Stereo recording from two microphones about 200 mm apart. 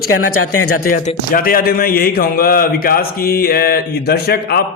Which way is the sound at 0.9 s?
45° left (ahead or behind).